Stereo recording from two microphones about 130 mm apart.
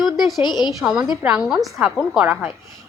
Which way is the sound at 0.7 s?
5° right (ahead or behind).